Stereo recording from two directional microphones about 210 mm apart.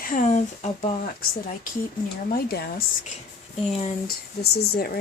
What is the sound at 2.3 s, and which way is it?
Speech, 50° left (ahead or behind).